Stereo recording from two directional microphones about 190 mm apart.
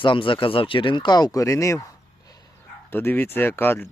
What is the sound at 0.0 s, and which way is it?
Speech, 25° left (ahead or behind).